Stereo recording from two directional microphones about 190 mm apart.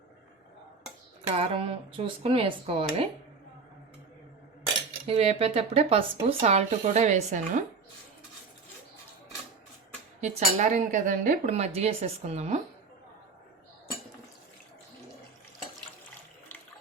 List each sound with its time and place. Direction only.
1.4 s speech: 30° right (ahead or behind)
5.0 s speech: 30° right (ahead or behind)
10.2 s speech: 40° right (ahead or behind)